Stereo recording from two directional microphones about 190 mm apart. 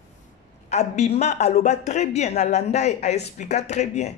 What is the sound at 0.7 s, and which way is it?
A man's voice, 35° left (ahead or behind).